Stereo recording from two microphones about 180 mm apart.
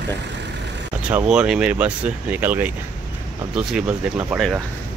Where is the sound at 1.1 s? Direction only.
5° right (ahead or behind).